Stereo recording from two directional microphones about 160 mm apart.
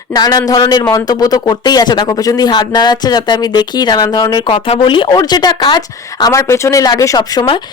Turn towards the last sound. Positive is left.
turn(degrees=25)  # may be behind; listen again after turning